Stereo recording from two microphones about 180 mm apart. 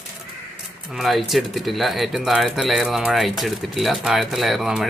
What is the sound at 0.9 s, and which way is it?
Speech, centre (ahead or behind).